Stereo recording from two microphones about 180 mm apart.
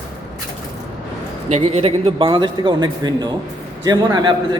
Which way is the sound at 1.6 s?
35° right (ahead or behind).